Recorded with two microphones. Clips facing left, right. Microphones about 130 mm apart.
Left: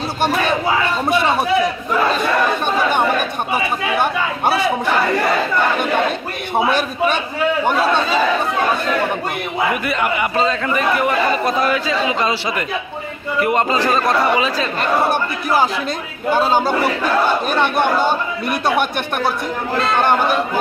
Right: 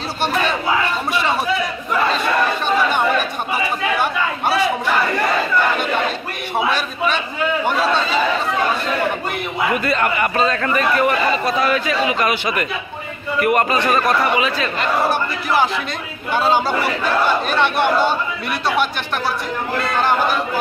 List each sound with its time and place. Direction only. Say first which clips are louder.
9.9 s a man's voice: even; 20° left (ahead or behind)
16.3 s speech: left 2 dB; 45° left (ahead or behind)
19.8 s a man's voice: left 3 dB; 60° left (ahead or behind)